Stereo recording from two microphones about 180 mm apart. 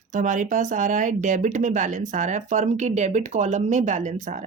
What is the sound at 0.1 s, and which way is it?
Speech, 45° right (ahead or behind).